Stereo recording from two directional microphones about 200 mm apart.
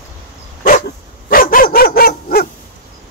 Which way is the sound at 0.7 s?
45° left (ahead or behind).